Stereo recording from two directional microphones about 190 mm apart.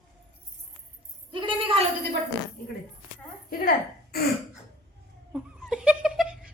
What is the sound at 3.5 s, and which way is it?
Speech, 50° left (ahead or behind).